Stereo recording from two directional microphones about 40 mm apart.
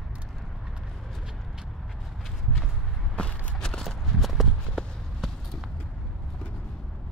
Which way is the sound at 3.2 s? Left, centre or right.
Left.